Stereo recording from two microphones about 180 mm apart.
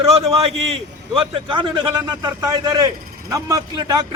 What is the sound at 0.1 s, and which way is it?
A man's voice, 35° right (ahead or behind).